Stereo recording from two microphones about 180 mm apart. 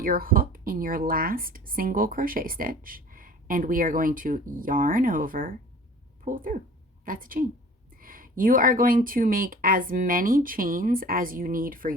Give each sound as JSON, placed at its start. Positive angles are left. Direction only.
{"t": 0.0, "sound": "a woman's voice", "side_deg": -50}